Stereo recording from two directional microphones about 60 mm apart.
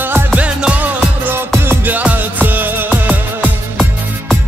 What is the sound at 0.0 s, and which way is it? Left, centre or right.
Music, right.